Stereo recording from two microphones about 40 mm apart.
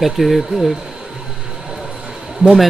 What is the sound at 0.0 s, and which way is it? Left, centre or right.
Speech, centre.